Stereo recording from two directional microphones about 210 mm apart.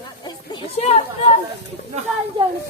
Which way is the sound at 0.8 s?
30° left (ahead or behind).